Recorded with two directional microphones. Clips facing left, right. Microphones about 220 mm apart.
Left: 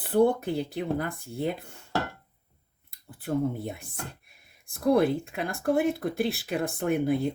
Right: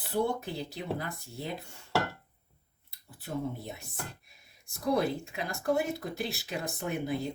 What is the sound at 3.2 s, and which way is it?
Speech, 55° left (ahead or behind).